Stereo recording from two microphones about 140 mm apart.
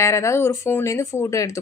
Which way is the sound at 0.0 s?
20° left (ahead or behind).